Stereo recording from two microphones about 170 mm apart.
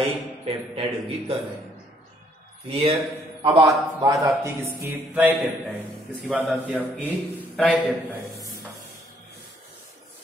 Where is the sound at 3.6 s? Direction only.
20° right (ahead or behind).